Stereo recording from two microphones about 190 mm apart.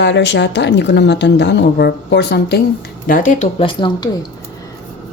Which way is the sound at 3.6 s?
25° left (ahead or behind).